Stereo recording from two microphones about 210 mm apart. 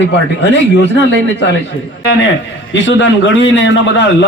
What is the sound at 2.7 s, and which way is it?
A man's voice, 60° left (ahead or behind).